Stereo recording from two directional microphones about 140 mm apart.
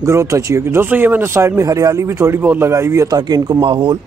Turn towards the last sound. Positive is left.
turn(degrees=-35)  # may be behind; listen again after turning